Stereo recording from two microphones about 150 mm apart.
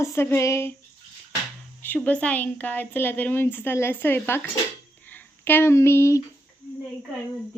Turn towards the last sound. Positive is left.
turn(degrees=20)  # may be behind; listen again after turning